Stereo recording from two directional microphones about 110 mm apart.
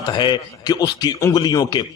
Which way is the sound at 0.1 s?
45° left (ahead or behind).